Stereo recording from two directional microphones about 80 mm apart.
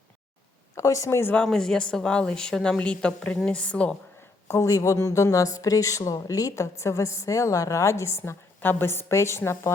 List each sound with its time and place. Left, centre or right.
0.8 s a woman's voice: left
1.4 s speech: centre
4.4 s a woman's voice: left